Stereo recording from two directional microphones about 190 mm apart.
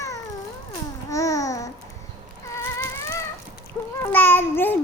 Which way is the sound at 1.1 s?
15° left (ahead or behind).